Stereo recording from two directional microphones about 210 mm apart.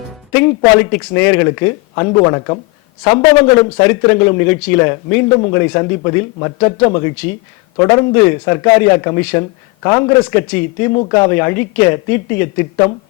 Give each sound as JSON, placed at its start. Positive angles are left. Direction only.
{"t": 0.3, "sound": "a man's voice", "side_deg": 10}